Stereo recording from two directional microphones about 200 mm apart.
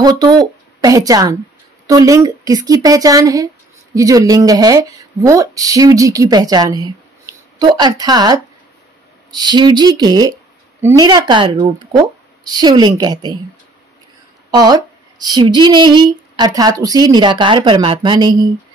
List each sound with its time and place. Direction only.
0.0 s a woman's voice: 20° right (ahead or behind)
14.5 s a woman's voice: 20° right (ahead or behind)